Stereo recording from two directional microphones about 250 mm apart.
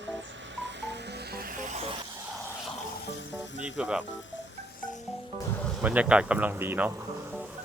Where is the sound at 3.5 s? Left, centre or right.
Centre.